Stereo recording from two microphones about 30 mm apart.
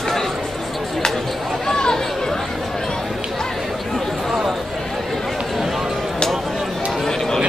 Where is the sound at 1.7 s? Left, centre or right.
Left.